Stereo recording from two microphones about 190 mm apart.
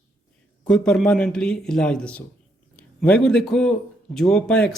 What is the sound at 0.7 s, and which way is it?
Speech, 5° left (ahead or behind).